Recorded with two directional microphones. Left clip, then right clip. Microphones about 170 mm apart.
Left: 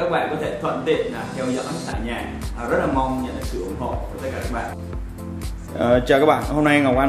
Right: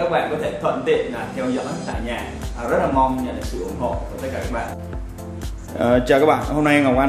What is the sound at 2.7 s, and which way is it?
Speech, 5° right (ahead or behind).